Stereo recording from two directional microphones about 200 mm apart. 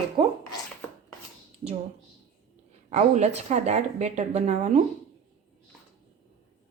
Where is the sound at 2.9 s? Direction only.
35° right (ahead or behind).